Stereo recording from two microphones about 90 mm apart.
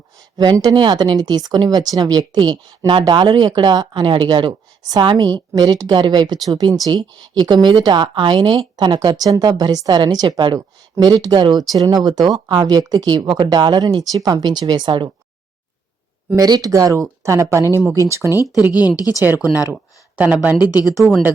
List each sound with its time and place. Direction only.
0.7 s a woman's voice: 55° right (ahead or behind)
6.5 s a woman's voice: 45° right (ahead or behind)
16.4 s speech: 45° right (ahead or behind)
18.7 s speech: 45° left (ahead or behind)
20.1 s a woman's voice: 15° right (ahead or behind)
20.7 s speech: 45° left (ahead or behind)